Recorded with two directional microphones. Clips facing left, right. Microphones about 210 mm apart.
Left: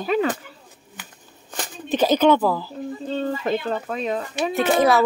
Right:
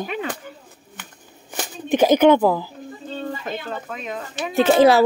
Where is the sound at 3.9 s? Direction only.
35° left (ahead or behind).